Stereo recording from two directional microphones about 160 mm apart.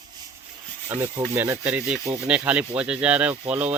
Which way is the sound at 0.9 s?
15° right (ahead or behind).